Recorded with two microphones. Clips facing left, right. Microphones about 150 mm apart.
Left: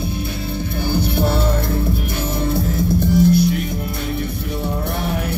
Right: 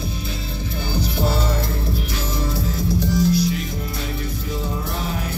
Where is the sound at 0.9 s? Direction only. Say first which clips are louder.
Left 3 dB; 60° left (ahead or behind).